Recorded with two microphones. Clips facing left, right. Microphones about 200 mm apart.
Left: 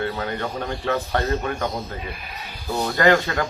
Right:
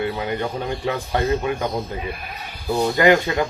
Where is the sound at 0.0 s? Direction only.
15° right (ahead or behind).